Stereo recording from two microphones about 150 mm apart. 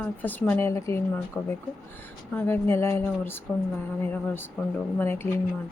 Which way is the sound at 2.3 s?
15° left (ahead or behind).